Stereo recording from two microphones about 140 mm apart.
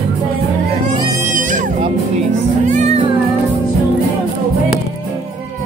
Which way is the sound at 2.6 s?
60° right (ahead or behind).